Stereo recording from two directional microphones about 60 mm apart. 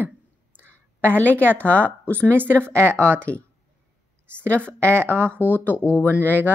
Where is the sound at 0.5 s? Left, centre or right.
Right.